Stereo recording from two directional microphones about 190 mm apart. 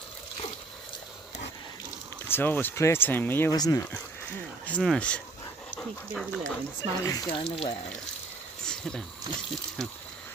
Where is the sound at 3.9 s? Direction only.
5° left (ahead or behind).